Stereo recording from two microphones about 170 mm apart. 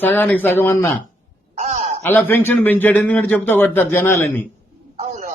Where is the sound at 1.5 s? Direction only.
45° right (ahead or behind).